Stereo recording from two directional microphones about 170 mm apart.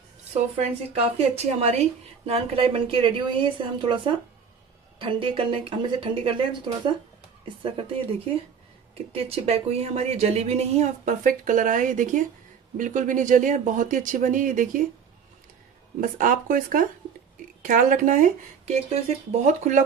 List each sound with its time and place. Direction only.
1.1 s speech: 40° right (ahead or behind)
9.1 s speech: 35° right (ahead or behind)
16.0 s speech: 55° right (ahead or behind)